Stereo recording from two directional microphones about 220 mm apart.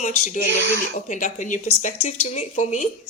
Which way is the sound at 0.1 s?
80° left.